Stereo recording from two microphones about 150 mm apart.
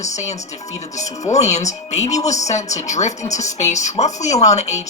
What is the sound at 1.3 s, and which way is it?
Speech, 50° left (ahead or behind).